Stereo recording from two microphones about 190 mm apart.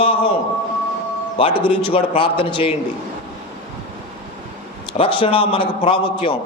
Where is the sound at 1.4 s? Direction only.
25° left (ahead or behind).